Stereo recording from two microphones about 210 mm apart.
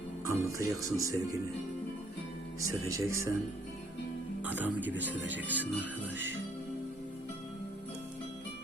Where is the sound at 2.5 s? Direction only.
15° right (ahead or behind).